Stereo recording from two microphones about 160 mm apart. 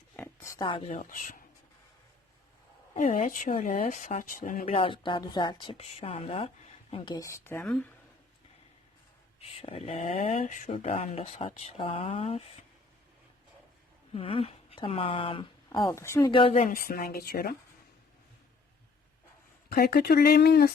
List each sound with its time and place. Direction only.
0.2 s oink: 20° left (ahead or behind)
0.6 s speech: 35° left (ahead or behind)
0.9 s speech: 55° left (ahead or behind)
3.1 s speech: 50° left (ahead or behind)
4.6 s speech: 35° left (ahead or behind); by 7.9 s 5° left (ahead or behind)
9.6 s speech: 40° left (ahead or behind)
14.1 s speech: 35° left (ahead or behind); by 16.3 s 15° left (ahead or behind)
16.3 s speech: 35° left (ahead or behind)
16.6 s a woman's voice: 60° left (ahead or behind)
19.7 s speech: 70° left (ahead or behind)